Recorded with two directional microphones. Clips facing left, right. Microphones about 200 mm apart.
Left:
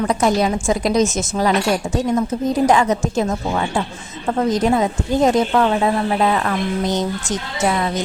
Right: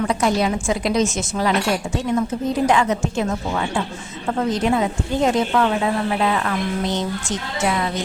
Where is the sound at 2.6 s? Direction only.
40° left (ahead or behind).